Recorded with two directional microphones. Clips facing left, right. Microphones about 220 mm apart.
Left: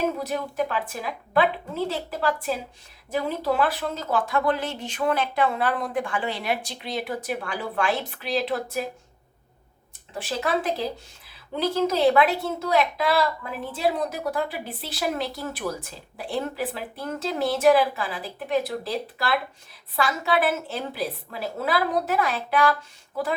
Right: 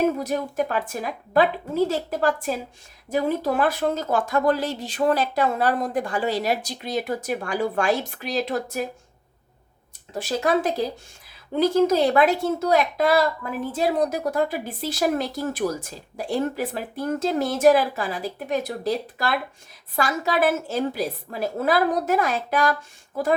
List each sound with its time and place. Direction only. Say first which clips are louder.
0.2 s speech: right 2 dB; 45° right (ahead or behind)
10.2 s speech: right 4 dB; 40° right (ahead or behind)